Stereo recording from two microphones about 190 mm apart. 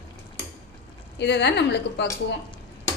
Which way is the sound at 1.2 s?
65° left (ahead or behind).